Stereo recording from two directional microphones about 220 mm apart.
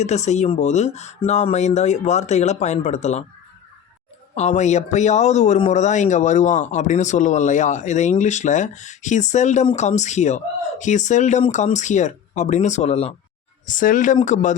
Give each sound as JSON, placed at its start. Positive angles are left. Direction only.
{"t": 0.0, "sound": "speech", "side_deg": 30}
{"t": 4.4, "sound": "speech", "side_deg": 30}